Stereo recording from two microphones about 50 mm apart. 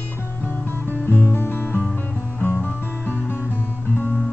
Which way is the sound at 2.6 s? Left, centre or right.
Left.